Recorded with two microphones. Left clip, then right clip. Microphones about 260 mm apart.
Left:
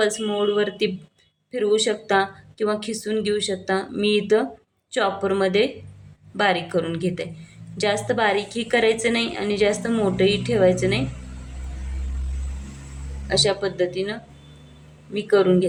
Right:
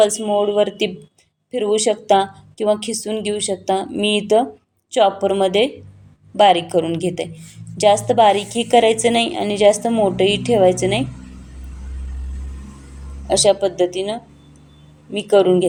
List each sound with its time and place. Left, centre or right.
0.0 s a woman's voice: centre
13.2 s a woman's voice: centre